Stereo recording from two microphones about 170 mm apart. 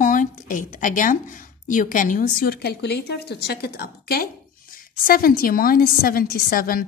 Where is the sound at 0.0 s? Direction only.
50° left (ahead or behind).